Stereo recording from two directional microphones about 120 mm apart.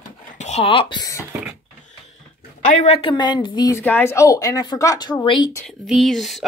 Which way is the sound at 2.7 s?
80° left.